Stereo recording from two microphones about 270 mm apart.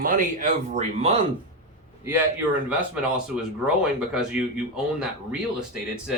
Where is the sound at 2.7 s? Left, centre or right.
Centre.